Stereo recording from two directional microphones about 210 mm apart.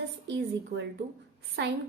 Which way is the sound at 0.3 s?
55° right (ahead or behind).